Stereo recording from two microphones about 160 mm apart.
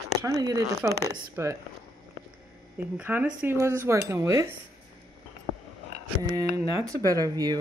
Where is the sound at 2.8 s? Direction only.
10° right (ahead or behind).